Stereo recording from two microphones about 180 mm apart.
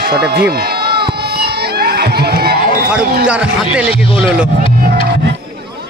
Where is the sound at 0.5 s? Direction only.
60° right (ahead or behind).